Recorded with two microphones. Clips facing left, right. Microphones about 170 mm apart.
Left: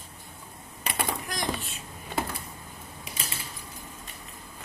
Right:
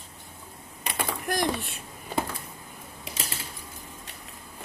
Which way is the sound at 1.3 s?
60° right (ahead or behind).